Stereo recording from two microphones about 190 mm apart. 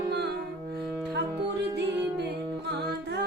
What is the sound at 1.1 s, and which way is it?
Music, 65° right (ahead or behind).